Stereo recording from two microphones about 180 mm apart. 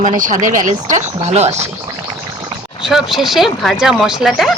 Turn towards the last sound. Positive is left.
turn(degrees=0)  # may be behind; listen again after turning